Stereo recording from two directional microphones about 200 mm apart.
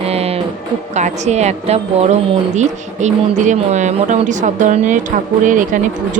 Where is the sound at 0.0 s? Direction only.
30° right (ahead or behind).